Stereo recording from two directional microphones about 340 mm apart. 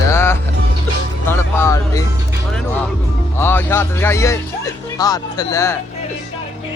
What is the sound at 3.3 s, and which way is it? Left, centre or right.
Music, centre.